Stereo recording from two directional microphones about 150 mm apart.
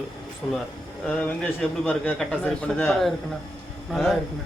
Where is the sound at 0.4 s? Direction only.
10° left (ahead or behind).